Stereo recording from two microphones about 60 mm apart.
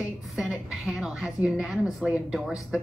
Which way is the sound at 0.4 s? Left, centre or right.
Centre.